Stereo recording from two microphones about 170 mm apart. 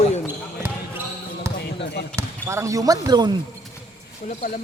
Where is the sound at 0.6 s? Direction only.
15° right (ahead or behind).